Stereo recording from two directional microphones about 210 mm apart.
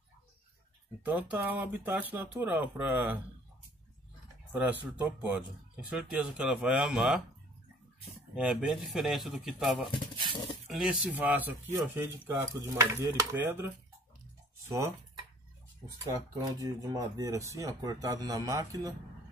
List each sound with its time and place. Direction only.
1.0 s speech: 5° right (ahead or behind)
4.5 s speech: 10° right (ahead or behind)
8.4 s speech: 5° right (ahead or behind)
10.3 s speech: 20° left (ahead or behind)
10.7 s speech: 5° right (ahead or behind)
14.7 s speech: 15° right (ahead or behind)
16.6 s speech: 15° right (ahead or behind)